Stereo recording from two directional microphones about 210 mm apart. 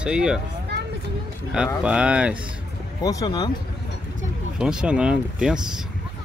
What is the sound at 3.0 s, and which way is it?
Speech, 20° left (ahead or behind).